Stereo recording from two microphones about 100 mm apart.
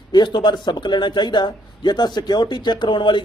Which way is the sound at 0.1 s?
50° left (ahead or behind).